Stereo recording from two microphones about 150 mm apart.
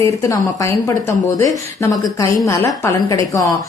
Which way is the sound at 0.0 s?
20° left (ahead or behind).